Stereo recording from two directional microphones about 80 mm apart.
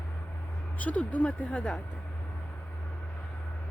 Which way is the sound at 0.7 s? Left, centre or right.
Centre.